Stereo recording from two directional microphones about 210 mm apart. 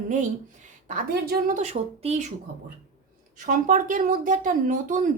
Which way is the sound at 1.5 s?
35° right (ahead or behind).